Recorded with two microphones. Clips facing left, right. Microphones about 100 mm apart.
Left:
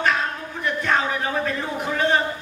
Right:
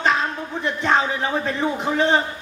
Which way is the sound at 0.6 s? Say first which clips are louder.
Right 2 dB; 20° right (ahead or behind).